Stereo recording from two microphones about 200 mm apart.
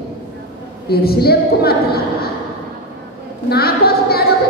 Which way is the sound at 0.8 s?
50° left (ahead or behind).